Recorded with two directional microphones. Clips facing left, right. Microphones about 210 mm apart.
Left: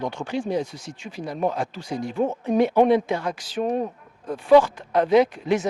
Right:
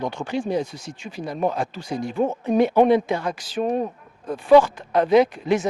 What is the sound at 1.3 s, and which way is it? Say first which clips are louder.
Speech: right 1 dB; 25° right (ahead or behind).